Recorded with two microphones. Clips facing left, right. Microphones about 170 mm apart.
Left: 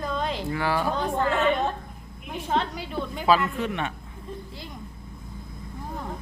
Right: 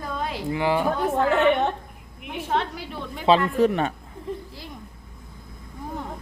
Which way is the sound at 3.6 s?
40° right (ahead or behind).